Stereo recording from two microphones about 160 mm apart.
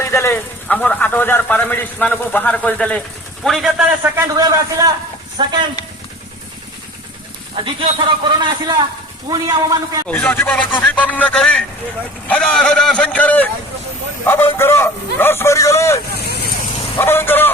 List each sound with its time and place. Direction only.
0.0 s a man's voice: 15° left (ahead or behind); by 3.9 s centre (ahead or behind)
4.0 s a man's voice: 20° right (ahead or behind)
7.5 s a man's voice: 35° right (ahead or behind)
10.1 s speech: 10° left (ahead or behind)
16.1 s vehicle: 80° left
17.0 s speech: 15° left (ahead or behind)